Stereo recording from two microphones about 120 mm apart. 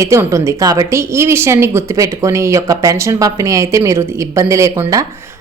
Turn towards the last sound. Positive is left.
turn(degrees=-30)  # may be behind; listen again after turning